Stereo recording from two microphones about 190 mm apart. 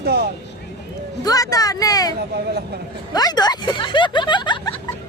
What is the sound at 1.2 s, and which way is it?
Speech, 20° left (ahead or behind).